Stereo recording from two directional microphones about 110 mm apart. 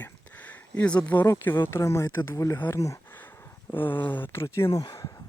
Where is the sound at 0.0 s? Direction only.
15° left (ahead or behind).